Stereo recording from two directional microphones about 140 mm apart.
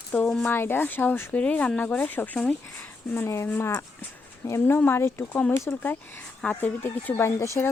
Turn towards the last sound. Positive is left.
turn(degrees=20)  # may be behind; listen again after turning